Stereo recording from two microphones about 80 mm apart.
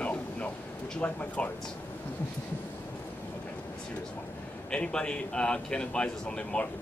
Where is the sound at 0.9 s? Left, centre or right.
Centre.